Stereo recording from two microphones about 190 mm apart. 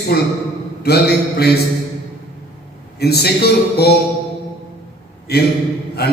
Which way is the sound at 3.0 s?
55° left (ahead or behind).